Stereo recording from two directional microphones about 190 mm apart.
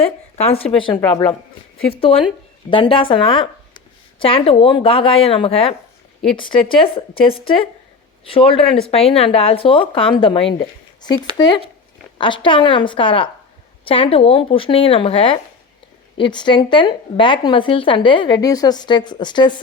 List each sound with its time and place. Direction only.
0.6 s a woman's voice: 30° left (ahead or behind)